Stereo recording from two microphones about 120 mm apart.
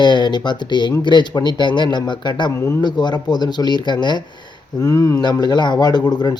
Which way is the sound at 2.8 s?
35° left (ahead or behind).